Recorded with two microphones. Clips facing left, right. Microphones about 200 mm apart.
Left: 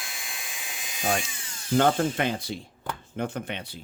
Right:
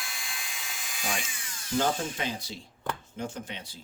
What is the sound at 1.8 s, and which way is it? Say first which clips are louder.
Speech: left 6 dB; 60° left (ahead or behind).